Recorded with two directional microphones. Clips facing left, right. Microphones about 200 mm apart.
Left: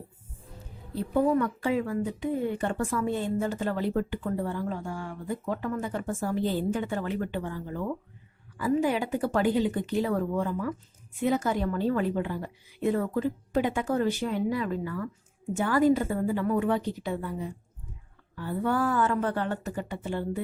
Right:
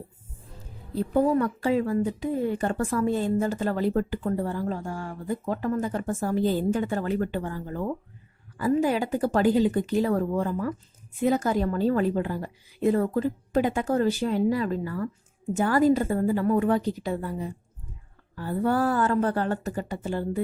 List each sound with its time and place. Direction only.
1.1 s a woman's voice: 35° right (ahead or behind)